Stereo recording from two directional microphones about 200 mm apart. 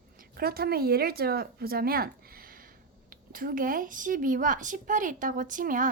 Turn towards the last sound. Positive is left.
turn(degrees=-40)  # may be behind; listen again after turning